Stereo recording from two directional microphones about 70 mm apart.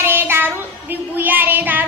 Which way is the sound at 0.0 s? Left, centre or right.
Right.